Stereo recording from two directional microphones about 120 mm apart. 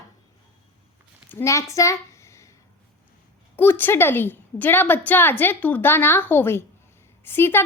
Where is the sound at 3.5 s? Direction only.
15° left (ahead or behind).